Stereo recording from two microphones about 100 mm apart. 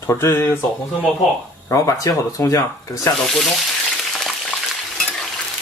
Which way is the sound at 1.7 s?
30° left (ahead or behind).